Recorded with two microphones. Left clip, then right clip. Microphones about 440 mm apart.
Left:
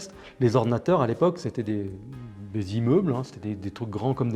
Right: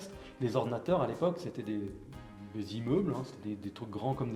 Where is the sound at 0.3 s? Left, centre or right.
Left.